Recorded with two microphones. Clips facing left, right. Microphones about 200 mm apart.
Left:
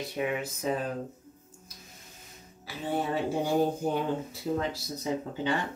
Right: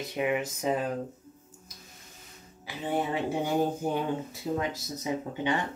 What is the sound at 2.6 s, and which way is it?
Speech, 15° right (ahead or behind).